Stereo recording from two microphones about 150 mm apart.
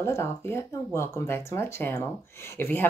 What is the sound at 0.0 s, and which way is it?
Speech, 15° left (ahead or behind).